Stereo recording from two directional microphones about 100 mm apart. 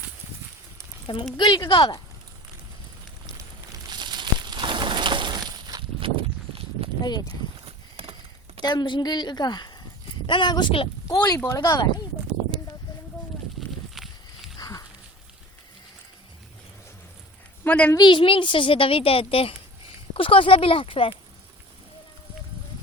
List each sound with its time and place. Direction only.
1.0 s a woman's voice: 50° left (ahead or behind)
1.7 s a woman's voice: 60° left (ahead or behind)
3.8 s a sound: 45° right (ahead or behind)
6.0 s walk: 65° right (ahead or behind)
7.0 s speech: 45° left (ahead or behind)
8.6 s a woman's voice: 45° left (ahead or behind)
11.4 s speech: 35° left (ahead or behind)
13.9 s a sound: centre (ahead or behind)
14.6 s a sound: 40° left (ahead or behind)
17.6 s a woman's voice: 15° left (ahead or behind)
17.9 s a woman's voice: 50° left (ahead or behind)